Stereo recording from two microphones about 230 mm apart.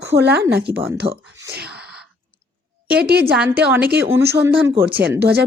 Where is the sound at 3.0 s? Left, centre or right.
Right.